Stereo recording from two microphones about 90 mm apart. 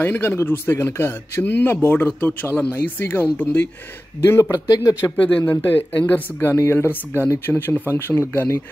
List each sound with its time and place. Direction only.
0.0 s speech: 25° left (ahead or behind)
4.5 s speech: 40° left (ahead or behind)
5.5 s speech: 20° left (ahead or behind)